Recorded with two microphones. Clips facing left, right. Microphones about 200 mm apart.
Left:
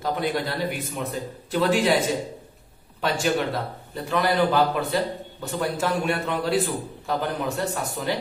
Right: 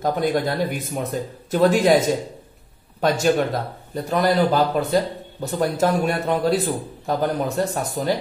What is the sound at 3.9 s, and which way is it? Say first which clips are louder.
A man's voice: right 4 dB; 40° right (ahead or behind).